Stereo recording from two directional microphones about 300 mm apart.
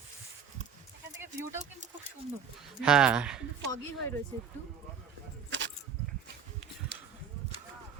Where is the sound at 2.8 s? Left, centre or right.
Centre.